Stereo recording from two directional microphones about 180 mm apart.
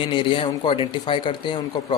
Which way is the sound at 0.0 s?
25° left (ahead or behind).